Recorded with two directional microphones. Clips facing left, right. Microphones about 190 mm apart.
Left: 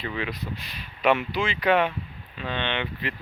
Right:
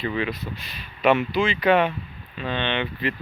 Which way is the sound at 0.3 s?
10° left (ahead or behind).